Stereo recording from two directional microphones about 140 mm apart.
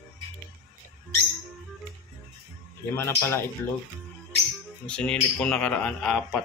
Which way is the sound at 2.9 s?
15° left (ahead or behind).